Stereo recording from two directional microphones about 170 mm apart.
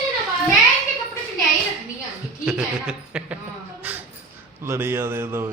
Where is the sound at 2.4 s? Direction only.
5° right (ahead or behind).